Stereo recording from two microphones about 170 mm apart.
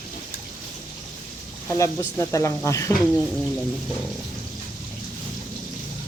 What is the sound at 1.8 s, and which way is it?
Speech, 20° left (ahead or behind).